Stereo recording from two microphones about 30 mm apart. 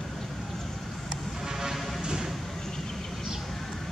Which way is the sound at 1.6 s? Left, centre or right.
Centre.